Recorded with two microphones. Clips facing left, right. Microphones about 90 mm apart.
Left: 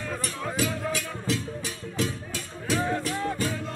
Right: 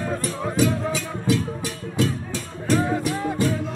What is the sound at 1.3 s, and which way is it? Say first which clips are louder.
Music: right 6 dB; 90° right.